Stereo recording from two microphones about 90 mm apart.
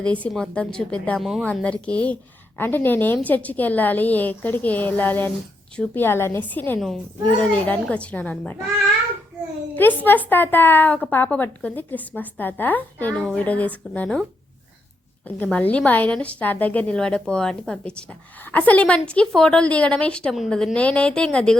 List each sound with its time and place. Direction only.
0.0 s a woman's voice: 15° left (ahead or behind)
1.2 s a woman's voice: centre (ahead or behind)
1.5 s a woman's voice: 15° left (ahead or behind)
6.7 s a woman's voice: centre (ahead or behind)
7.3 s a woman's voice: 15° left (ahead or behind)
9.7 s a woman's voice: 20° left (ahead or behind)
15.4 s a woman's voice: 15° left (ahead or behind)